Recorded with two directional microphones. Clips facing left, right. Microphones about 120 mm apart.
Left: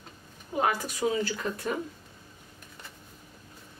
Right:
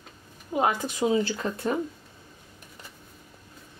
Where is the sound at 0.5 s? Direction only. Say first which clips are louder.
Right 3 dB; 20° right (ahead or behind).